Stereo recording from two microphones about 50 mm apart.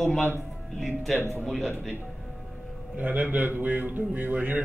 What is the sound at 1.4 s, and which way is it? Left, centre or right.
Speech, centre.